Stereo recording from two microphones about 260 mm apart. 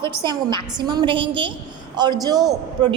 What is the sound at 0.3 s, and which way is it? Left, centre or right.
A woman's voice, centre.